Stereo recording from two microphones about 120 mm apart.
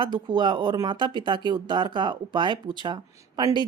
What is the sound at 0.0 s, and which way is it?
Speech, 40° right (ahead or behind).